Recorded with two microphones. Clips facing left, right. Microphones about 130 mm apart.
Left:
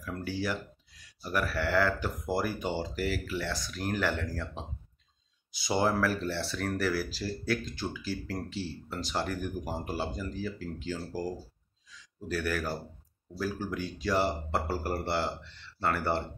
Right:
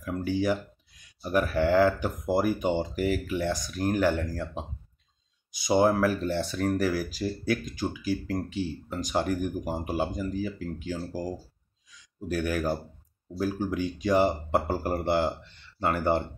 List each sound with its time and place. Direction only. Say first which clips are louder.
0.0 s speech: right 7 dB; 20° right (ahead or behind)
11.9 s a sound: right 3 dB; 15° right (ahead or behind)
13.4 s speech: right 5 dB; 20° right (ahead or behind)